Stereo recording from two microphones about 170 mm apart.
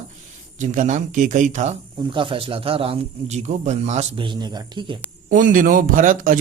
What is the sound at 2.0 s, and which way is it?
Speech, 30° right (ahead or behind).